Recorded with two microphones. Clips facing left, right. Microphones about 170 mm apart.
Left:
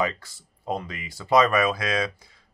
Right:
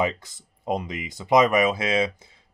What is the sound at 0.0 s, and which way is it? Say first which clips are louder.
Speech: right 2 dB; 20° right (ahead or behind).